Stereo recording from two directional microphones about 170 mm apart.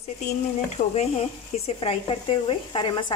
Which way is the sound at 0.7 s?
35° left (ahead or behind).